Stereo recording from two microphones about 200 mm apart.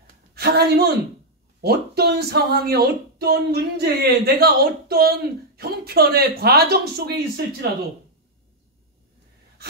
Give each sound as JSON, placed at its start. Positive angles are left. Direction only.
{"t": 0.3, "sound": "a woman's voice", "side_deg": -50}